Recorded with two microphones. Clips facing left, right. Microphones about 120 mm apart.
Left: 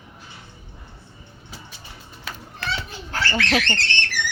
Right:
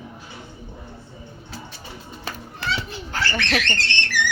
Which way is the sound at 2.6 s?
15° right (ahead or behind).